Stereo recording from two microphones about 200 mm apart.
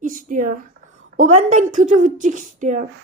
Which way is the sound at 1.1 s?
40° right (ahead or behind).